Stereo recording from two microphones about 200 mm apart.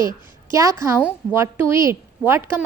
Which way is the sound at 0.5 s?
15° right (ahead or behind).